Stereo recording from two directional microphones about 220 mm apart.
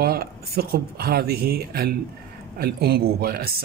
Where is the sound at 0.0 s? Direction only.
45° right (ahead or behind).